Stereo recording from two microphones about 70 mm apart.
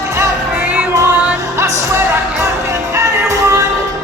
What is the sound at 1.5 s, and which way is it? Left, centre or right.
Music, right.